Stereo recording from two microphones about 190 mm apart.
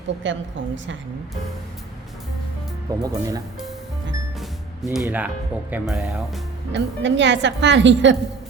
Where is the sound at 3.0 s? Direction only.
20° right (ahead or behind).